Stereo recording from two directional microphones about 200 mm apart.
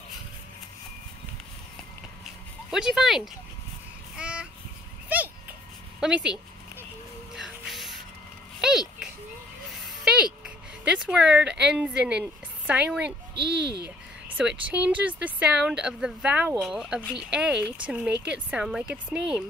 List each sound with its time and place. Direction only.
2.7 s speech: 5° right (ahead or behind)
4.2 s a sound: 5° right (ahead or behind)
5.9 s speech: 5° right (ahead or behind)
7.3 s music: centre (ahead or behind)
8.5 s a sound: 5° right (ahead or behind)
11.6 s a woman's voice: 5° right (ahead or behind)
13.3 s a child's voice: 55° right (ahead or behind)
13.8 s a sound: 5° right (ahead or behind)
14.7 s speech: 5° right (ahead or behind)